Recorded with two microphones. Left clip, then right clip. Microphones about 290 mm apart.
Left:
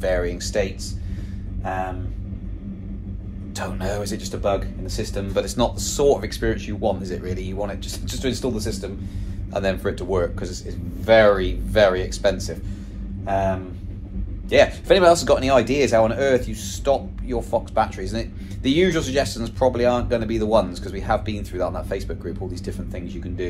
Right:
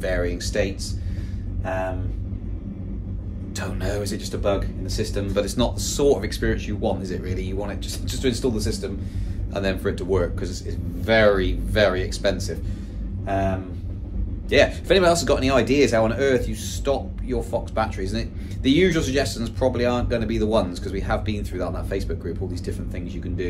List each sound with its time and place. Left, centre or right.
0.0 s speech: centre
3.5 s speech: centre
14.5 s speech: centre